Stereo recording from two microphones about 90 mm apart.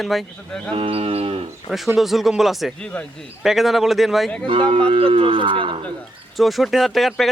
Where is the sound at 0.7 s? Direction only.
90° right.